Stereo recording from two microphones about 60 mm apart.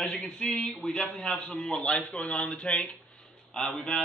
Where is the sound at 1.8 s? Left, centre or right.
Centre.